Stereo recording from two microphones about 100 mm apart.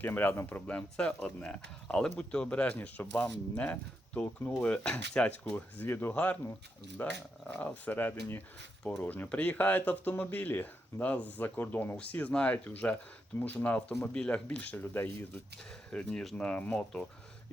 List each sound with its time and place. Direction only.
0.0 s speech: 20° left (ahead or behind)
8.8 s speech: 10° left (ahead or behind)
15.9 s speech: 10° left (ahead or behind)